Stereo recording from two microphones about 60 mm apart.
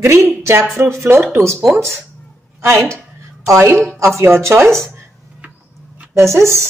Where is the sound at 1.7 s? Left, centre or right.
Centre.